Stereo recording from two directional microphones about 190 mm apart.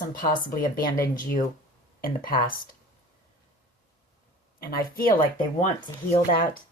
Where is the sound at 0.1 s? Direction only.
50° left (ahead or behind).